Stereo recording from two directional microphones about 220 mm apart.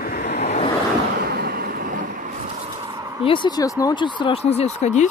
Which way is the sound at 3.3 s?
20° left (ahead or behind).